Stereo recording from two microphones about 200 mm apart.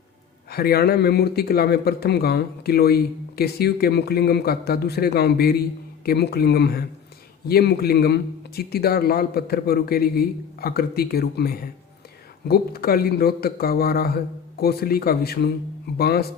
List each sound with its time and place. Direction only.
0.5 s speech: 50° left (ahead or behind)